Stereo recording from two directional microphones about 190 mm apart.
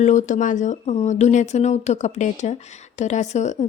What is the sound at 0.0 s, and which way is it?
Speech, 40° left (ahead or behind).